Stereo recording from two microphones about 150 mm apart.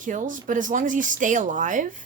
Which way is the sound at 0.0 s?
60° right (ahead or behind).